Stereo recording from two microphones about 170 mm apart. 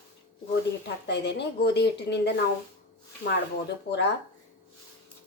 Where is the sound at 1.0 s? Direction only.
90° left.